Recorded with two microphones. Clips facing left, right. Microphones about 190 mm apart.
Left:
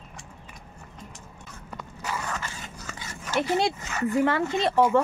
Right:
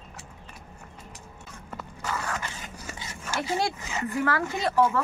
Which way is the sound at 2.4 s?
15° right (ahead or behind).